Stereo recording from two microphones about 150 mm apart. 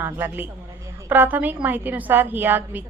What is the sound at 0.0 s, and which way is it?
A woman's voice, 15° right (ahead or behind).